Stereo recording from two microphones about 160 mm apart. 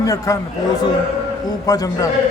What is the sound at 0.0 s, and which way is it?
Speech, 20° left (ahead or behind).